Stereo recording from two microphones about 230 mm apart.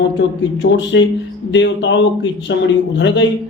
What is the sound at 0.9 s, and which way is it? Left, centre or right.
Speech, left.